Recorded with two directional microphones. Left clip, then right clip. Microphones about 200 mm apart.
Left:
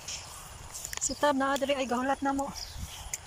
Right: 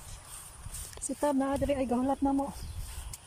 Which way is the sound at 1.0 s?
10° right (ahead or behind).